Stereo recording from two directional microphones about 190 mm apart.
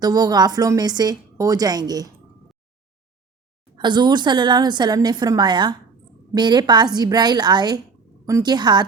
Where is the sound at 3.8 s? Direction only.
25° right (ahead or behind).